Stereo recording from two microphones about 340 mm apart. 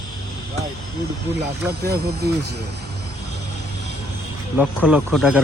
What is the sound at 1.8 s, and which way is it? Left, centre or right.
Speech, right.